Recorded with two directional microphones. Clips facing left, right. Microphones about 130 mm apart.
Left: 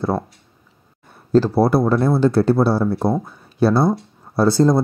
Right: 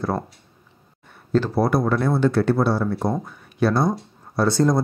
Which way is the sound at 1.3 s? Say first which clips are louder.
Left 5 dB; 35° left (ahead or behind).